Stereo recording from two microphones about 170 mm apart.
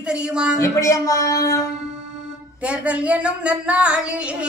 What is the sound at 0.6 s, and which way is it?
Speech, 20° left (ahead or behind).